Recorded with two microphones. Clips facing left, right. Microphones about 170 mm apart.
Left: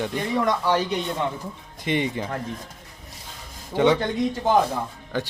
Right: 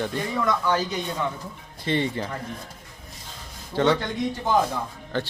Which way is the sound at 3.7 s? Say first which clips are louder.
Left 2 dB; 15° left (ahead or behind).